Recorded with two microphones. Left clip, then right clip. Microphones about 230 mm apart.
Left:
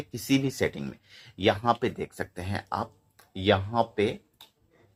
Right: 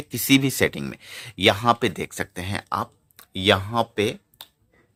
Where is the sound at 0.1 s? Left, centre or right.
Right.